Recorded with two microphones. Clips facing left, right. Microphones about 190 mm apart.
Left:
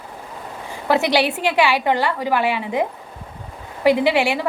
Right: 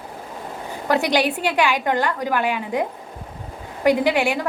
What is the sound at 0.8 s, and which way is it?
A woman's voice, 5° left (ahead or behind).